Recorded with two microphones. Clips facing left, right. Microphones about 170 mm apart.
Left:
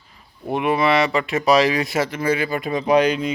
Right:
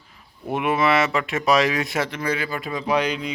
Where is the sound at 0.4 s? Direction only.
Centre (ahead or behind); by 2.6 s 15° left (ahead or behind).